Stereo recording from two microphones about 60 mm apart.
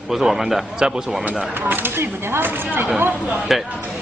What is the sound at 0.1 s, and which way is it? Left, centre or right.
Speech, centre.